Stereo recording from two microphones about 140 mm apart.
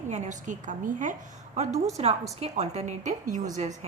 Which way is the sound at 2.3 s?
50° right (ahead or behind).